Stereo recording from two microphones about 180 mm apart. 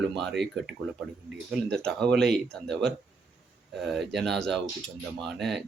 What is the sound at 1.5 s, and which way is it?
Speech, centre (ahead or behind).